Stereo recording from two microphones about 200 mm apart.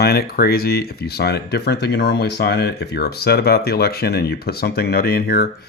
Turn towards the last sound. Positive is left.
turn(degrees=50)  # may be behind; listen again after turning